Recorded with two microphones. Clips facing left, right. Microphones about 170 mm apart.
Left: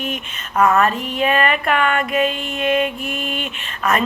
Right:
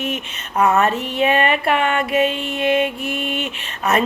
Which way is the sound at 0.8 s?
25° right (ahead or behind).